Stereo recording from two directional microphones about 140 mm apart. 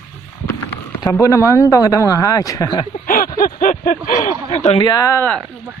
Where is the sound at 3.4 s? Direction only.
75° left (ahead or behind).